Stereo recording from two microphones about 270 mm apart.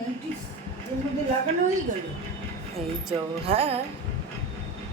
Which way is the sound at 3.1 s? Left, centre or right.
Right.